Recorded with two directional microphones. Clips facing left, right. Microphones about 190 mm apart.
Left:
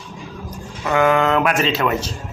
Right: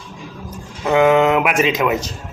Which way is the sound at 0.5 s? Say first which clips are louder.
Right 4 dB; 20° right (ahead or behind).